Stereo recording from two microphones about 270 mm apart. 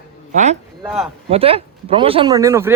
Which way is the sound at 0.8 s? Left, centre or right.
Centre.